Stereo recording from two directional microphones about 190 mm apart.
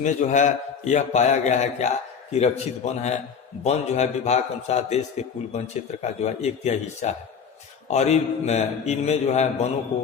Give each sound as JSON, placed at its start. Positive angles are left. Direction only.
{"t": 0.0, "sound": "a man's voice", "side_deg": 40}